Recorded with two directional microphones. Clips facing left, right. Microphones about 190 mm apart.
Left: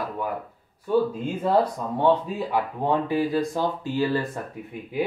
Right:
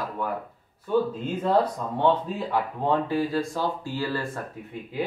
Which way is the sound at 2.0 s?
10° left (ahead or behind).